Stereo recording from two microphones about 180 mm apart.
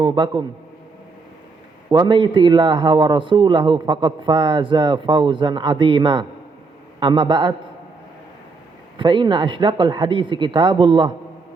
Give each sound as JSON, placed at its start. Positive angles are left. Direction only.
{"t": 0.0, "sound": "a man's voice", "side_deg": -30}
{"t": 1.9, "sound": "a man's voice", "side_deg": -25}
{"t": 9.0, "sound": "a man's voice", "side_deg": -25}